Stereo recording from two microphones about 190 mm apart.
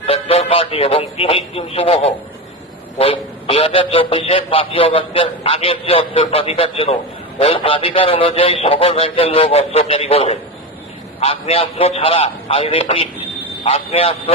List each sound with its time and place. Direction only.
0.0 s a man's voice: 30° left (ahead or behind)